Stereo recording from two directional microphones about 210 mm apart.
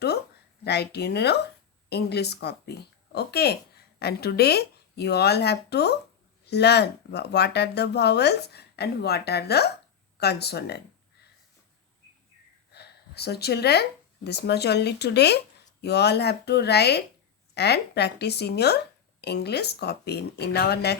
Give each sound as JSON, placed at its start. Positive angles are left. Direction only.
{"t": 0.6, "sound": "speech", "side_deg": 50}
{"t": 12.7, "sound": "a sound", "side_deg": 50}
{"t": 14.3, "sound": "speech", "side_deg": 50}